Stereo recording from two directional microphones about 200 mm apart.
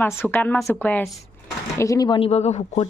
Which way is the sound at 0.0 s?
10° left (ahead or behind).